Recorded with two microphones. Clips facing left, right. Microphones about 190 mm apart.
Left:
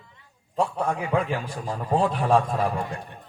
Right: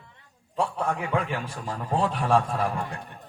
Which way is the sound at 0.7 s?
35° left (ahead or behind).